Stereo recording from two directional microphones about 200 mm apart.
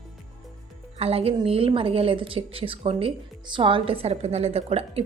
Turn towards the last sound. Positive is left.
turn(degrees=-30)  # may be behind; listen again after turning